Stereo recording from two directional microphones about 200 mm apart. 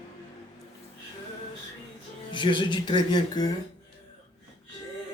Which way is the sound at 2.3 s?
25° left (ahead or behind).